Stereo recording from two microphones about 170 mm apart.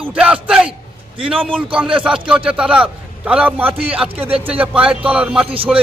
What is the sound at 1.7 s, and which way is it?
A man's voice, 10° right (ahead or behind).